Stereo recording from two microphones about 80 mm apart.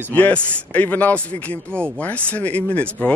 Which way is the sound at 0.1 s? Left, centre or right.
Centre.